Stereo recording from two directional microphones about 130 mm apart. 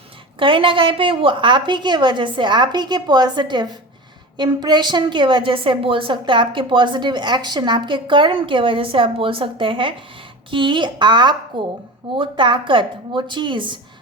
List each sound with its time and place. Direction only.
0.3 s a woman's voice: 40° right (ahead or behind)